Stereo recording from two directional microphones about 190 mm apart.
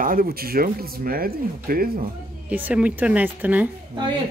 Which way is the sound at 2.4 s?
10° right (ahead or behind).